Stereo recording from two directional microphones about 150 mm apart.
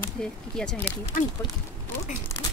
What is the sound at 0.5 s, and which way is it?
Speech, 5° left (ahead or behind).